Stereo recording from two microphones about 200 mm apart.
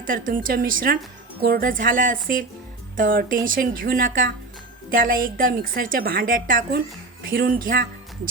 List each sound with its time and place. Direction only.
0.0 s a woman's voice: 45° right (ahead or behind)